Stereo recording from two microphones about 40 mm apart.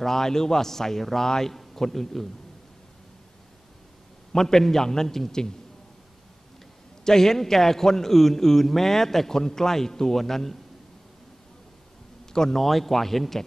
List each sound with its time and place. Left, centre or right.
0.0 s a man's voice: centre
4.3 s a man's voice: centre
7.1 s a man's voice: centre
12.3 s speech: centre